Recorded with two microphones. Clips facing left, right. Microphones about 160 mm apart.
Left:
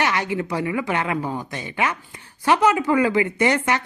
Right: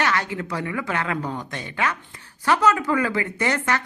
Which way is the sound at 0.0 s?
15° left (ahead or behind).